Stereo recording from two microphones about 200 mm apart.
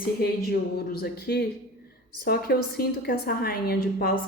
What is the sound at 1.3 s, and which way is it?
A woman's voice, 50° left (ahead or behind).